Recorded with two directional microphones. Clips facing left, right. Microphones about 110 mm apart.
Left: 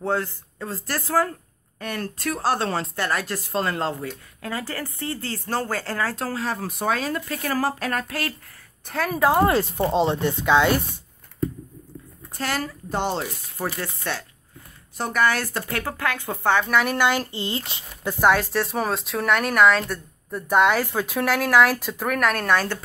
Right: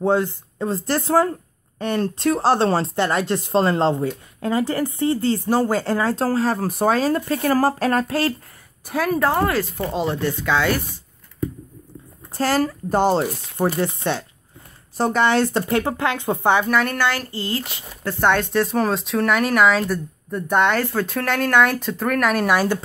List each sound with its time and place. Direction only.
0.0 s speech: 20° right (ahead or behind)
6.2 s speech: 35° right (ahead or behind)
8.8 s speech: 5° right (ahead or behind)
9.1 s speech: 10° left (ahead or behind)
9.5 s speech: 25° left (ahead or behind)
12.3 s speech: 35° right (ahead or behind)
13.7 s speech: 20° right (ahead or behind)
16.6 s speech: centre (ahead or behind)
16.9 s speech: 20° left (ahead or behind)
18.0 s speech: 5° left (ahead or behind); by 22.8 s 10° right (ahead or behind)